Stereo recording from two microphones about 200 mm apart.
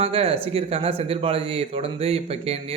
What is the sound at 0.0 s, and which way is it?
Speech, 30° right (ahead or behind).